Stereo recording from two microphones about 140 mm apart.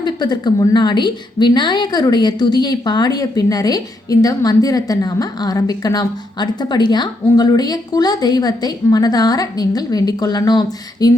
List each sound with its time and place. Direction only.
0.0 s a woman's voice: 30° left (ahead or behind)